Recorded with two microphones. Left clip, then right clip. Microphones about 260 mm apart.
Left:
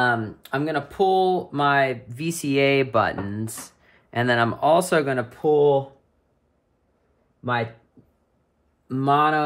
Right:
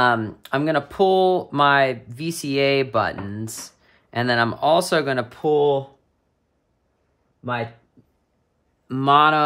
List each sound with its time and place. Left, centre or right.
0.0 s speech: right
2.0 s speech: centre
5.4 s speech: centre
7.4 s speech: centre
9.1 s speech: centre